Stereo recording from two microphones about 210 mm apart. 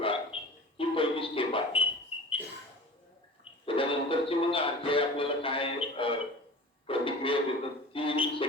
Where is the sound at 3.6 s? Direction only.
25° left (ahead or behind).